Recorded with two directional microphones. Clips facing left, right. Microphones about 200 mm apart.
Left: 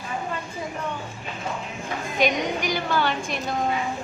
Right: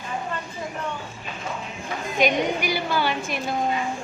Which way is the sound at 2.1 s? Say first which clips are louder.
Right 2 dB; 5° right (ahead or behind).